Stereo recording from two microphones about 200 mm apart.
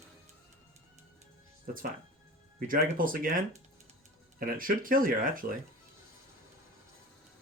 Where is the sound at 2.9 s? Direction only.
45° right (ahead or behind).